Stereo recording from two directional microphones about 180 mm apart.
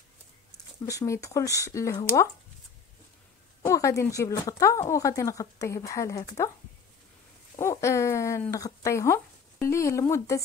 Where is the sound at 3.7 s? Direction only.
15° left (ahead or behind).